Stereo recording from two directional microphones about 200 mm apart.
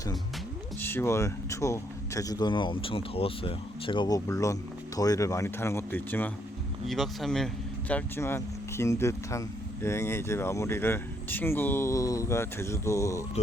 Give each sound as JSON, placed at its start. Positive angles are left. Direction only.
{"t": 0.8, "sound": "speech", "side_deg": 10}